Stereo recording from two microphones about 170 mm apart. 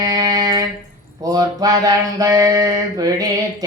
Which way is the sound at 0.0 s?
25° right (ahead or behind).